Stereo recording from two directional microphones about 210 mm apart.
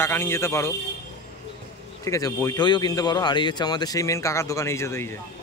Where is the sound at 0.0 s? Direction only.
10° left (ahead or behind).